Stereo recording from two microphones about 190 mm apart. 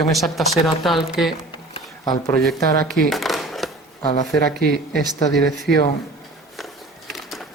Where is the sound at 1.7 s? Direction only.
20° left (ahead or behind).